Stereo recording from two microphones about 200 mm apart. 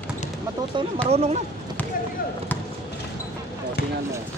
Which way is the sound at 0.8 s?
25° right (ahead or behind).